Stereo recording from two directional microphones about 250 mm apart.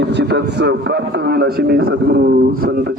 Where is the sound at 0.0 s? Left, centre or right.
Right.